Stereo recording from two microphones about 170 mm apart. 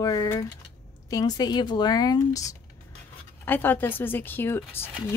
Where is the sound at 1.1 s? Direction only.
20° left (ahead or behind).